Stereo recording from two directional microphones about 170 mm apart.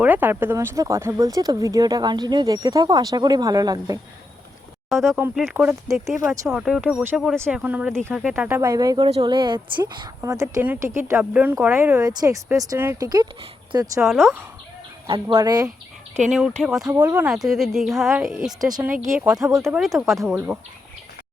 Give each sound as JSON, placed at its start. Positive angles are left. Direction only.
{"t": 0.0, "sound": "speech", "side_deg": -10}
{"t": 4.9, "sound": "speech", "side_deg": 0}
{"t": 10.2, "sound": "speech", "side_deg": -15}
{"t": 14.0, "sound": "speech", "side_deg": 0}
{"t": 15.0, "sound": "speech", "side_deg": -30}
{"t": 16.3, "sound": "speech", "side_deg": 0}
{"t": 16.8, "sound": "speech", "side_deg": -20}
{"t": 17.2, "sound": "speech", "side_deg": 0}
{"t": 19.5, "sound": "speech", "side_deg": -15}
{"t": 19.7, "sound": "speech", "side_deg": -5}